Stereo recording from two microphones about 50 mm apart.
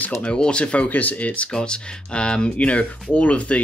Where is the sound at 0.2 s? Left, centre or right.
Centre.